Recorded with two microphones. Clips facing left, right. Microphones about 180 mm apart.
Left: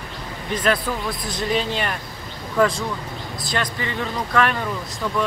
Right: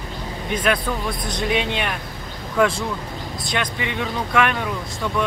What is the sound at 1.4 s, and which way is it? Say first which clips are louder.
Speech: even; 65° right (ahead or behind).